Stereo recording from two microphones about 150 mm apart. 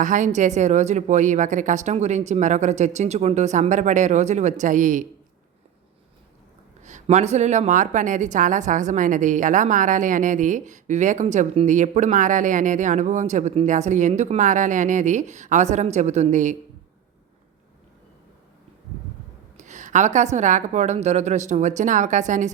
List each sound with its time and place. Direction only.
0.0 s a woman's voice: 55° right (ahead or behind)
6.8 s a woman's voice: 50° right (ahead or behind)
19.5 s a woman's voice: 55° right (ahead or behind)